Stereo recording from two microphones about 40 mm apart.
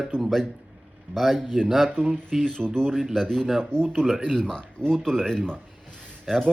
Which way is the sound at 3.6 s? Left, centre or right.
Centre.